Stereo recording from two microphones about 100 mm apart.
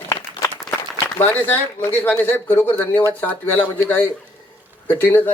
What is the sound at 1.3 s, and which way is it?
A man's voice, 20° left (ahead or behind).